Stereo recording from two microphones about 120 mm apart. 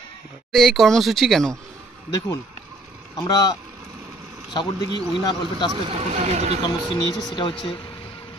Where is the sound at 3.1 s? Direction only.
35° left (ahead or behind).